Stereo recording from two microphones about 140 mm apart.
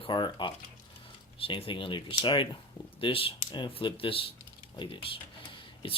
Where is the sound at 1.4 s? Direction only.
40° left (ahead or behind).